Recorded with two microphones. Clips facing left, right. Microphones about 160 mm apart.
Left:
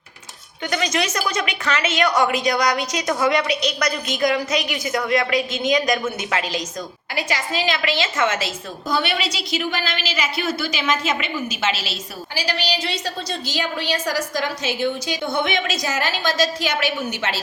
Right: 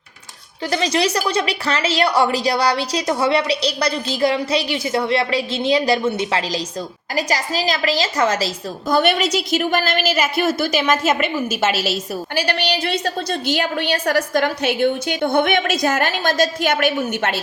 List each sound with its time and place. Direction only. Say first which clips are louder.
0.7 s a woman's voice: right 4 dB; 30° right (ahead or behind)
8.9 s a woman's voice: right 6 dB; 50° right (ahead or behind)